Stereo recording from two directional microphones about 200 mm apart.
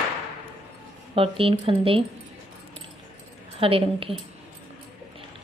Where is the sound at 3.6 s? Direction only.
25° right (ahead or behind).